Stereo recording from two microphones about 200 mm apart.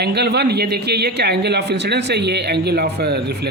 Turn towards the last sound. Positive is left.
turn(degrees=-55)  # may be behind; listen again after turning